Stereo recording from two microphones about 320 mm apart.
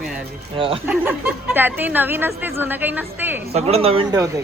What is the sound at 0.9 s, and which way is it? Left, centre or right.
A woman's voice, centre.